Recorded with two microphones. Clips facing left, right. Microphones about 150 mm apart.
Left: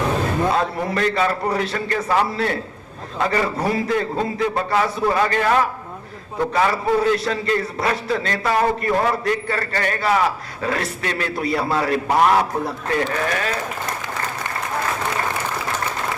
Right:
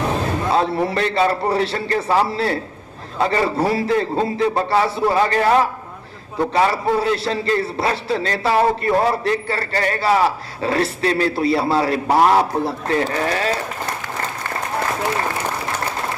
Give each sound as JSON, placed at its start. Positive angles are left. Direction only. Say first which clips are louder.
{"t": 0.5, "sound": "a man's voice", "louder": "right 3 dB", "side_deg": -30}